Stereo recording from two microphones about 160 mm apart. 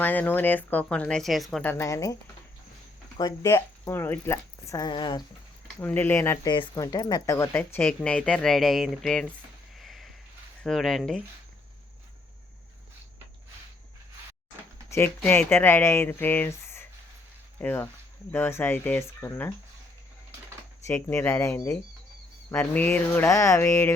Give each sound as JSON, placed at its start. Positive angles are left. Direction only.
{"t": 0.0, "sound": "speech", "side_deg": 10}
{"t": 1.6, "sound": "speech", "side_deg": 20}
{"t": 3.2, "sound": "speech", "side_deg": 20}
{"t": 5.8, "sound": "speech", "side_deg": 15}
{"t": 6.5, "sound": "speech", "side_deg": 25}
{"t": 9.7, "sound": "a sound", "side_deg": 0}
{"t": 10.6, "sound": "speech", "side_deg": 0}
{"t": 14.8, "sound": "speech", "side_deg": 15}
{"t": 20.8, "sound": "speech", "side_deg": 15}